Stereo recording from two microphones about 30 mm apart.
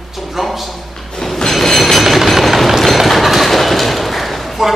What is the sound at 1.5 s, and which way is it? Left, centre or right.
Train, centre.